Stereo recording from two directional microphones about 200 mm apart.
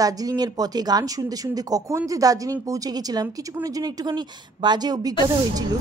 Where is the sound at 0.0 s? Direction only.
20° right (ahead or behind).